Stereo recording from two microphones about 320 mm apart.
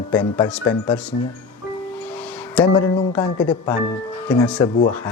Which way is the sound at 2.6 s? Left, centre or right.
Centre.